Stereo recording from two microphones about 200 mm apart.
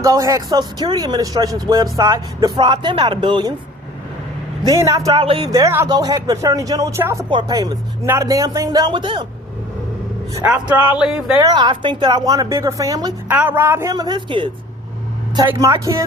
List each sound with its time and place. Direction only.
0.0 s speech: 15° right (ahead or behind)
4.6 s speech: 15° right (ahead or behind)
10.3 s speech: 5° right (ahead or behind)
11.3 s speech: 20° right (ahead or behind)
13.2 s speech: 10° right (ahead or behind)